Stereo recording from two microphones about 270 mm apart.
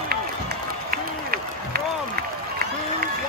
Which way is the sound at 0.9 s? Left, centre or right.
Right.